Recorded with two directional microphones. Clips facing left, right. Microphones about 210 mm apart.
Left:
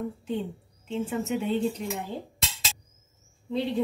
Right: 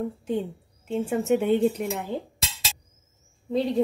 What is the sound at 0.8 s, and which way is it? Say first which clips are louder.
Speech: right 5 dB; 50° right (ahead or behind).